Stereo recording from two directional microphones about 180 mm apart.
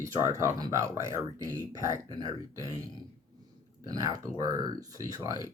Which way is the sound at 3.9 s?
20° right (ahead or behind).